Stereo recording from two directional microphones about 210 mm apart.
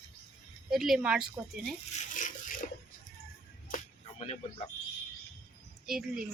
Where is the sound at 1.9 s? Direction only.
35° left (ahead or behind).